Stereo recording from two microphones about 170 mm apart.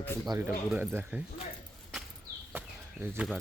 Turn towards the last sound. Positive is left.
turn(degrees=-10)  # may be behind; listen again after turning